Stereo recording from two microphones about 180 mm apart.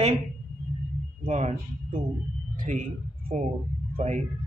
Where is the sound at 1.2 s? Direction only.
40° right (ahead or behind).